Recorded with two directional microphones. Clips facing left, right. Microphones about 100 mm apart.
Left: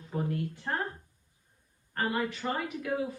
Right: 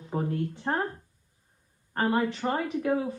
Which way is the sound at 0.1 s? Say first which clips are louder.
Right 3 dB; 25° right (ahead or behind).